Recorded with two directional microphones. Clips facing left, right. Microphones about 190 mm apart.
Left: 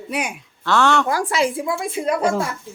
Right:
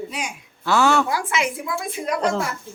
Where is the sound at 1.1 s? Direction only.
40° left (ahead or behind).